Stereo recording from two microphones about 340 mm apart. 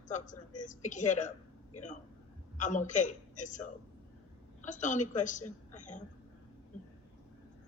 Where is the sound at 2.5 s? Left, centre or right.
Left.